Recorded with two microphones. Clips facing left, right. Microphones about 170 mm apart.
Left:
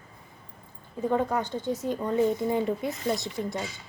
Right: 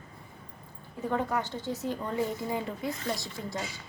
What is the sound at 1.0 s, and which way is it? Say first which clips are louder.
A woman's voice: left 4 dB; 20° left (ahead or behind).